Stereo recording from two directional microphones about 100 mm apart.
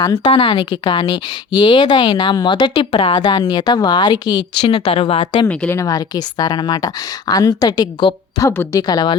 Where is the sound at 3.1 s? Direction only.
45° left (ahead or behind); by 5.4 s 60° left (ahead or behind).